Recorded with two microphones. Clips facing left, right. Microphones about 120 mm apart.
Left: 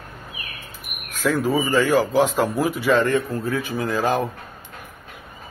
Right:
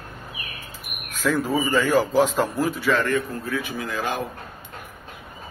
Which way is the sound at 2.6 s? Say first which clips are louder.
Left 3 dB; 20° left (ahead or behind).